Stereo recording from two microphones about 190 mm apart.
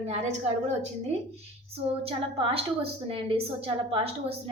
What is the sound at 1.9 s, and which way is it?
A woman's voice, 30° right (ahead or behind).